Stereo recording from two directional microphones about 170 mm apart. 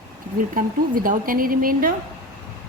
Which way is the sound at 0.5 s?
55° right (ahead or behind).